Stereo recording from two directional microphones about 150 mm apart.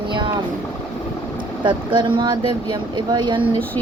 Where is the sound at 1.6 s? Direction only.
30° right (ahead or behind).